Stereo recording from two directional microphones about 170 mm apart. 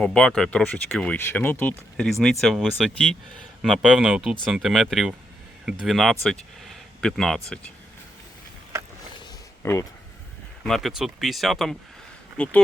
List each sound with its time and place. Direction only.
0.0 s speech: 5° left (ahead or behind)
6.7 s a sound: centre (ahead or behind)
9.6 s speech: 15° left (ahead or behind)
10.6 s speech: centre (ahead or behind)